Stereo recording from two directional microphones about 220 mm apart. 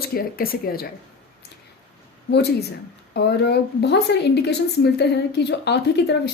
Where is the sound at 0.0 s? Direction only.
45° left (ahead or behind).